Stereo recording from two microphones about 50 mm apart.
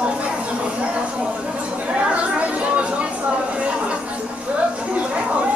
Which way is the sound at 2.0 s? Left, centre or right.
Right.